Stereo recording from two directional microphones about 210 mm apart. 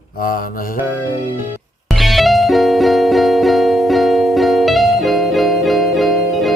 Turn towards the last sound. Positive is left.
turn(degrees=0)  # may be behind; listen again after turning